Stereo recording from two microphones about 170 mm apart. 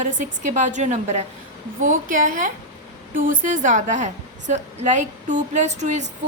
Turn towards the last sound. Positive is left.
turn(degrees=-40)  # may be behind; listen again after turning